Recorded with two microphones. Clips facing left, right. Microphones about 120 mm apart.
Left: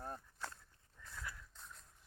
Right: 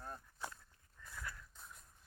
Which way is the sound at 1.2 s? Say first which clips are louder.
Right 1 dB; 10° left (ahead or behind).